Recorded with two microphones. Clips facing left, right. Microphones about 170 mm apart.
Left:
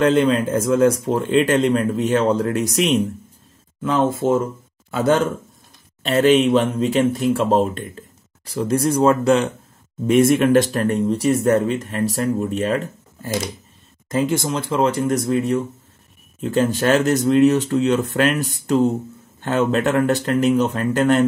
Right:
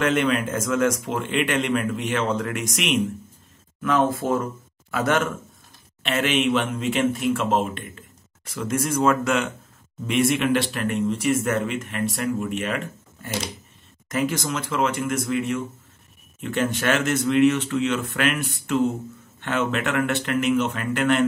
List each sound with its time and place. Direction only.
0.0 s speech: 30° left (ahead or behind)
3.8 s speech: 25° left (ahead or behind)
10.0 s speech: 45° left (ahead or behind)